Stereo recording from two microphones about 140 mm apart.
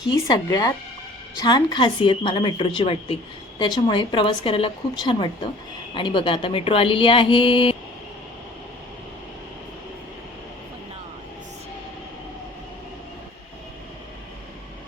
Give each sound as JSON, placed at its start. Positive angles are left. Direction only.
{"t": 0.3, "sound": "speech", "side_deg": 25}